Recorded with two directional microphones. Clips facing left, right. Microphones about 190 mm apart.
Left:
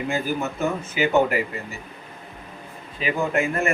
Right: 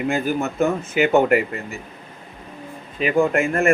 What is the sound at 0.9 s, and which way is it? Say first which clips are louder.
Speech: right 4 dB; 55° right (ahead or behind).